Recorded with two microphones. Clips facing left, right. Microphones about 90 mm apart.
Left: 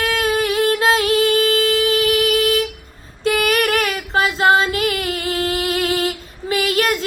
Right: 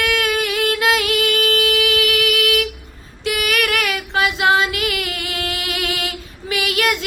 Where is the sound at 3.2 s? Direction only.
35° left (ahead or behind).